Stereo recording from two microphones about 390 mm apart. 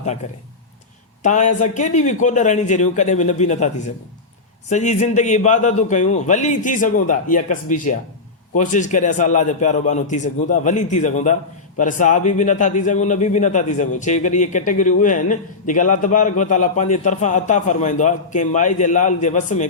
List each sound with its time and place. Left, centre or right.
0.2 s a man's voice: centre